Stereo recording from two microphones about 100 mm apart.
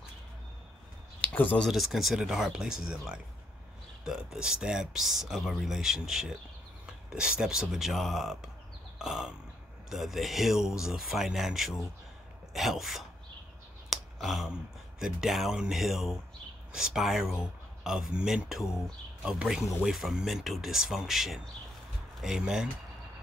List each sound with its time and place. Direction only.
1.2 s a sound: 15° left (ahead or behind)
1.7 s speech: 5° right (ahead or behind)
8.9 s burping: 5° right (ahead or behind)
9.8 s speech: centre (ahead or behind)
13.8 s clicking: centre (ahead or behind)
15.0 s speech: 5° right (ahead or behind)